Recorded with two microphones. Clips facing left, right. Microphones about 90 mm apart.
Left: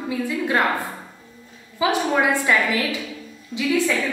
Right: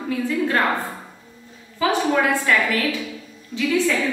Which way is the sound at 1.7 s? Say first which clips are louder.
Right 1 dB; 15° left (ahead or behind).